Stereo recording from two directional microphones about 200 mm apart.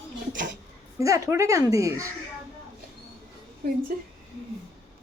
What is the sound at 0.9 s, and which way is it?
Speech, 15° right (ahead or behind).